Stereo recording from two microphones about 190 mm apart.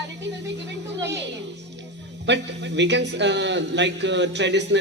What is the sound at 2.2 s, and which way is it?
A man's voice, 70° right (ahead or behind).